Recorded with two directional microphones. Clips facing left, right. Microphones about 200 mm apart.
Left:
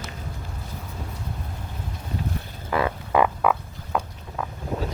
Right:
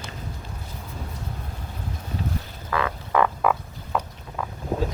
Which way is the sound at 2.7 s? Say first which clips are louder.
Left 2 dB; 30° left (ahead or behind).